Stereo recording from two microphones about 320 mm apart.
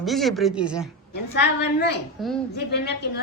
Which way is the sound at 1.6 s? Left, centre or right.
Left.